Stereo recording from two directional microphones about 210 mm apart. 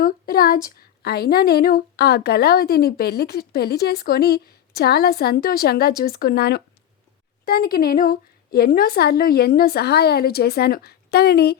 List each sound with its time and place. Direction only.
0.0 s speech: 45° left (ahead or behind)